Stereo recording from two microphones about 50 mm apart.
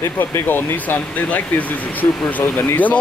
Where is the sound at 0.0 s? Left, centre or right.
Left.